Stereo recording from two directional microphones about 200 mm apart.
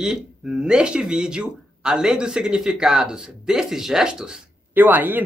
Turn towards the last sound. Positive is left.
turn(degrees=-10)  # may be behind; listen again after turning